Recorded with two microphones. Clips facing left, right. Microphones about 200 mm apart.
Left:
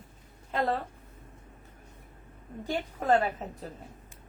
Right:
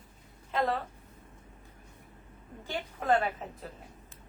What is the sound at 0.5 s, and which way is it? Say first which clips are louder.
Speech: left 1 dB; 40° left (ahead or behind).